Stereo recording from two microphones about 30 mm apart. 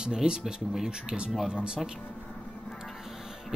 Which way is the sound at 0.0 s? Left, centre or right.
Right.